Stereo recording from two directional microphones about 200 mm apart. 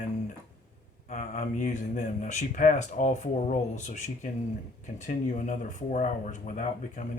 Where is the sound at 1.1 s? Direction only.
35° left (ahead or behind).